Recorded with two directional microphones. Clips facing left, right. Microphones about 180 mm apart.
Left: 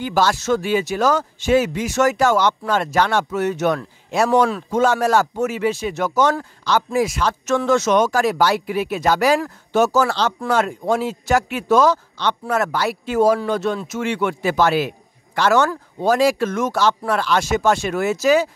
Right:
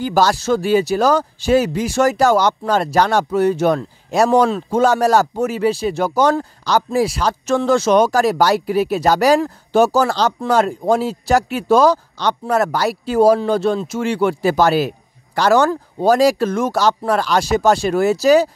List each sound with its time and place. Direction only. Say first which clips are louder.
0.0 s speech: right 3 dB; 40° right (ahead or behind)